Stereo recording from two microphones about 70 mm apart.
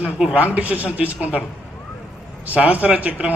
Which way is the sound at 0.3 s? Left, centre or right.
Right.